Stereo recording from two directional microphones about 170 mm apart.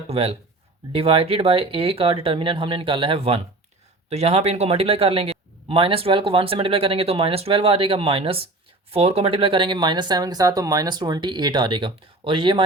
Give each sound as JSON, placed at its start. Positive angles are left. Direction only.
{"t": 0.1, "sound": "a man's voice", "side_deg": -35}